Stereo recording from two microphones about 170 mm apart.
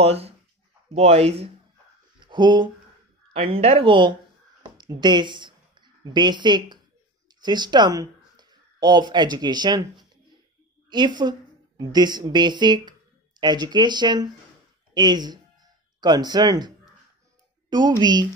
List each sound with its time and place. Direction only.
0.0 s speech: 35° right (ahead or behind)
2.1 s a sound: 25° right (ahead or behind)
3.3 s a woman's voice: 35° right (ahead or behind)